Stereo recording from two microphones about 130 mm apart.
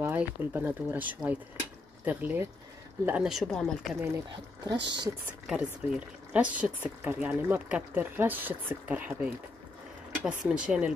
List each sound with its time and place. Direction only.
0.0 s a woman's voice: 15° right (ahead or behind); by 4.0 s 5° left (ahead or behind)
4.6 s speech: 35° right (ahead or behind)
5.5 s speech: 10° right (ahead or behind)
10.5 s speech: 5° right (ahead or behind)